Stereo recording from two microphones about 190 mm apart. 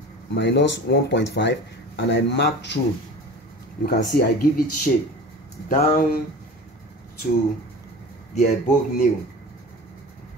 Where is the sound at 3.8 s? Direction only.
55° left (ahead or behind).